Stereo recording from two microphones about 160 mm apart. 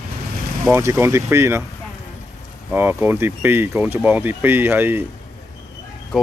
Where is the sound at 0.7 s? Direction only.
15° right (ahead or behind).